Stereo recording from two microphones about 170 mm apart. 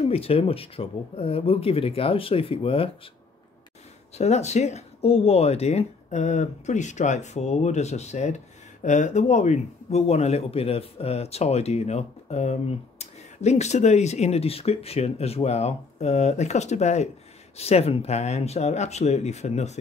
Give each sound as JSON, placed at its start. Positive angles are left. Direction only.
{"t": 0.1, "sound": "a man's voice", "side_deg": 35}
{"t": 4.2, "sound": "a man's voice", "side_deg": 40}